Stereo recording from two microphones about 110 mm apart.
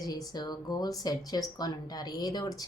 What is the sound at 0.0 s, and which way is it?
Speech, 35° left (ahead or behind).